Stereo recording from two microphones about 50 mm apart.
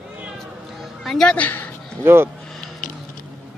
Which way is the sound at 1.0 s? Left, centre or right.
Centre.